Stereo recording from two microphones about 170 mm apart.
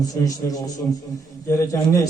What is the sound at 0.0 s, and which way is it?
A man's voice, 20° left (ahead or behind).